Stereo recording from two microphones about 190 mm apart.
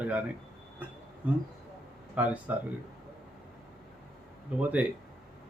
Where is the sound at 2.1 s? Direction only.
5° right (ahead or behind).